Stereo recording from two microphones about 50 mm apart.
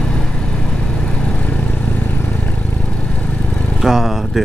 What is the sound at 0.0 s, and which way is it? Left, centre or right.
Vehicle, centre.